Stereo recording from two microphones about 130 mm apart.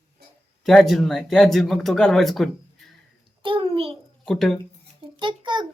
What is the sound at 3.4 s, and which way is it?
Speech, 40° right (ahead or behind).